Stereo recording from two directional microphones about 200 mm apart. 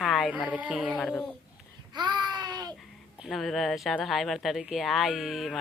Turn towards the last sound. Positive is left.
turn(degrees=0)  # may be behind; listen again after turning